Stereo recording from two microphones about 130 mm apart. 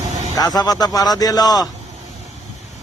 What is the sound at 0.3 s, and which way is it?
A man's voice, 30° left (ahead or behind).